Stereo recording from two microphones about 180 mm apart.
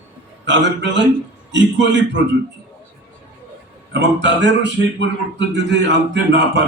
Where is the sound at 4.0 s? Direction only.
80° right.